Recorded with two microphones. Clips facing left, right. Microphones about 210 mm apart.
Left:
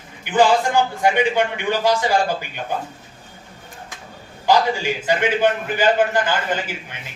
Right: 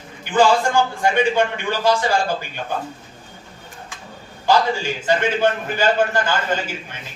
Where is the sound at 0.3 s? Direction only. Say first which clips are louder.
Even; 15° left (ahead or behind).